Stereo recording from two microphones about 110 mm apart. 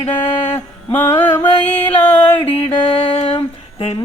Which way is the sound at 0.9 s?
20° left (ahead or behind).